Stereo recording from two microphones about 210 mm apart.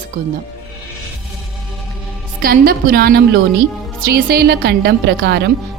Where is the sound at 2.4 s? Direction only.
45° right (ahead or behind).